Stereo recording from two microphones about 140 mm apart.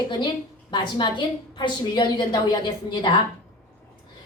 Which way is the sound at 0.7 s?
35° left (ahead or behind).